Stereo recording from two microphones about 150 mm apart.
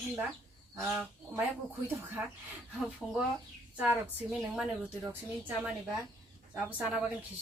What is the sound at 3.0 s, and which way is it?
Speech, 5° left (ahead or behind).